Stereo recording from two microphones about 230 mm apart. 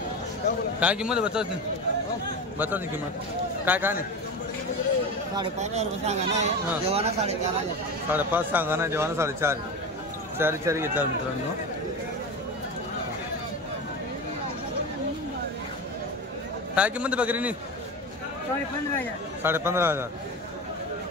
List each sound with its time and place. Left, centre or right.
0.7 s a man's voice: centre
3.6 s speech: centre
5.6 s speech: right
8.1 s speech: centre
16.7 s speech: centre
19.4 s speech: centre